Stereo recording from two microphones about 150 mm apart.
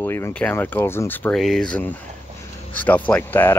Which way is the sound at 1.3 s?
Centre (ahead or behind).